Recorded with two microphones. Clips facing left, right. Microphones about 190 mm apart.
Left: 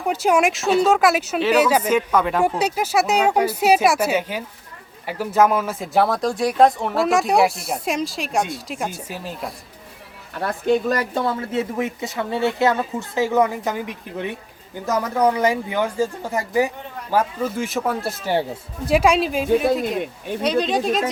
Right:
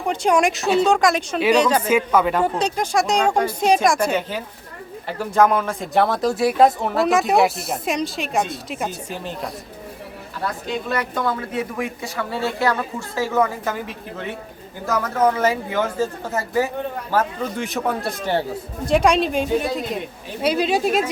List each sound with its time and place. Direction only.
0.1 s a woman's voice: 5° left (ahead or behind)
1.9 s speech: 5° right (ahead or behind)
2.4 s a woman's voice: 10° left (ahead or behind)
10.4 s a woman's voice: 45° left (ahead or behind); by 21.0 s 5° right (ahead or behind)